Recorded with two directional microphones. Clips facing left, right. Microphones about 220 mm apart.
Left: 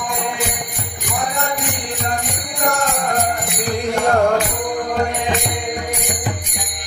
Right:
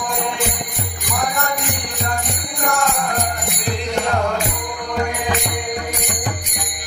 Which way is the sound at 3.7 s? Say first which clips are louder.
Left 4 dB; 50° left (ahead or behind).